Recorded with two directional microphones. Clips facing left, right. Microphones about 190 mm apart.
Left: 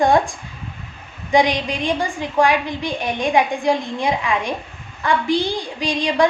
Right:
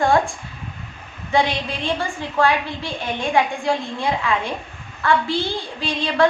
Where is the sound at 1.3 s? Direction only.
15° left (ahead or behind).